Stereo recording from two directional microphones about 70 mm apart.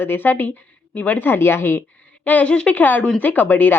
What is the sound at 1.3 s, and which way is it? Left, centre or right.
Speech, left.